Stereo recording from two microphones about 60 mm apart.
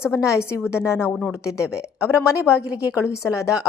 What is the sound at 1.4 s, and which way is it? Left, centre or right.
Speech, left.